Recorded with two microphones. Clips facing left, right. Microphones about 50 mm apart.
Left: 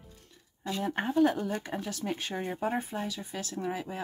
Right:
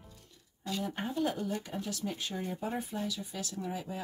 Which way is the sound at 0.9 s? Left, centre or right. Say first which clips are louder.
Left 9 dB; left.